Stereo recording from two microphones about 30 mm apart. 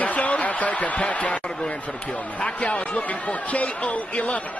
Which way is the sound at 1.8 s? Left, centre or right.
Left.